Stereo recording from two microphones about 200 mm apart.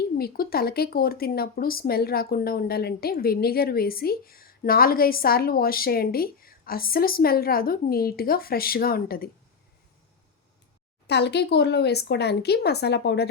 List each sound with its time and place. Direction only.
0.0 s speech: 50° left (ahead or behind)
11.0 s speech: 55° left (ahead or behind)